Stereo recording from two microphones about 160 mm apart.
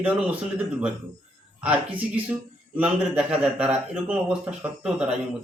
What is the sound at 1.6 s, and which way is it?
A man's voice, 10° right (ahead or behind).